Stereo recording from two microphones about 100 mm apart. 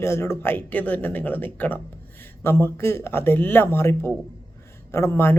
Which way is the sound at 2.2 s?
20° left (ahead or behind).